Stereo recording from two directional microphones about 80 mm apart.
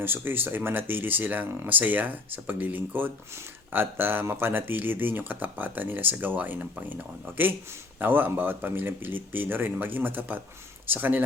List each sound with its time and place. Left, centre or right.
0.0 s speech: right